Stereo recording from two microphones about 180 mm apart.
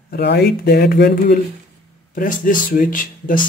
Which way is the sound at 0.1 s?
65° left (ahead or behind).